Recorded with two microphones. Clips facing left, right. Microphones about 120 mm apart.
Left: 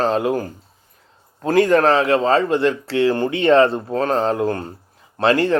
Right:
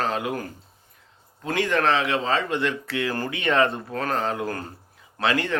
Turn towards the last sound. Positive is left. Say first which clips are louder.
# left 8 dB
turn(degrees=35)  # may be behind; listen again after turning